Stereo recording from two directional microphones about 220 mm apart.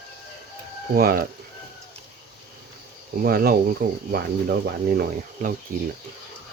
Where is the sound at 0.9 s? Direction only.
45° right (ahead or behind).